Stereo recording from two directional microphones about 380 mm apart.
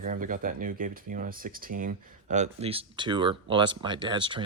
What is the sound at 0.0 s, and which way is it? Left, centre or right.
Speech, right.